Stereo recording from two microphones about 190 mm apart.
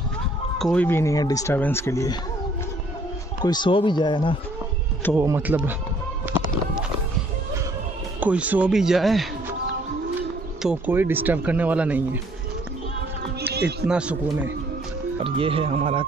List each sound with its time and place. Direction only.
0.6 s speech: 5° left (ahead or behind)
3.4 s speech: 25° left (ahead or behind)
5.1 s speech: 10° right (ahead or behind)
8.2 s speech: 10° right (ahead or behind)
10.6 s speech: 5° right (ahead or behind)
13.5 s speech: 60° right (ahead or behind)
13.8 s speech: 5° right (ahead or behind)
15.2 s speech: 30° right (ahead or behind)